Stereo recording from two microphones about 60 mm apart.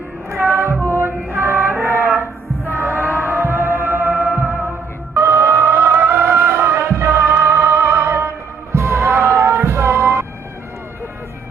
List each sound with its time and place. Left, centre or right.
0.4 s music: right
5.1 s music: right